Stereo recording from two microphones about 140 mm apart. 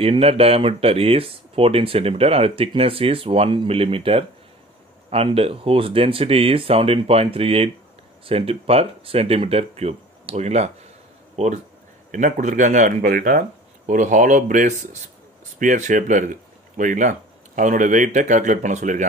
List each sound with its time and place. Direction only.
0.0 s speech: 45° right (ahead or behind); by 19.0 s 60° right (ahead or behind)